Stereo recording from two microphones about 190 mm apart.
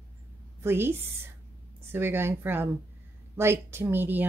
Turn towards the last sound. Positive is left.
turn(degrees=-10)  # may be behind; listen again after turning